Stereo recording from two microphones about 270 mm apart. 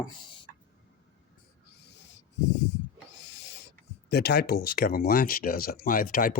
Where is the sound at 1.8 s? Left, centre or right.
Left.